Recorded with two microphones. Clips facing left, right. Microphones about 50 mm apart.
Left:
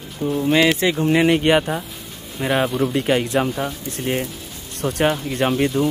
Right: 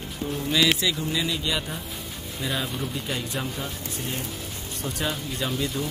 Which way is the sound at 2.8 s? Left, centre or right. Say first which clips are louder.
Left 12 dB; left.